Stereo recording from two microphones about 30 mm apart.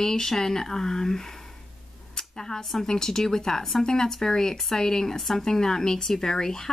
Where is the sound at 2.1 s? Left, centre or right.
Centre.